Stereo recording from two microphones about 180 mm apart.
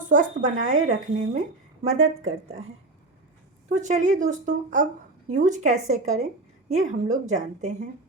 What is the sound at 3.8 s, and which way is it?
Speech, 45° right (ahead or behind).